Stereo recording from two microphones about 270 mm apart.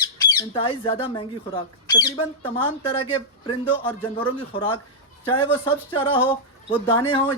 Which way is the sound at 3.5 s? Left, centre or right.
Centre.